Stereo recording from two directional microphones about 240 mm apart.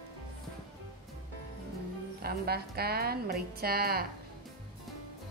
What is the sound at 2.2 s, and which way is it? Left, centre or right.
A woman's voice, right.